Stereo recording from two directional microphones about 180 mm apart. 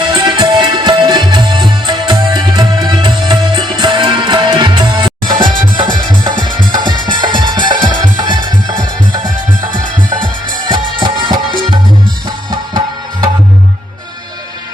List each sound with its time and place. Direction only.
0.1 s music: 25° right (ahead or behind)
10.7 s music: 25° right (ahead or behind)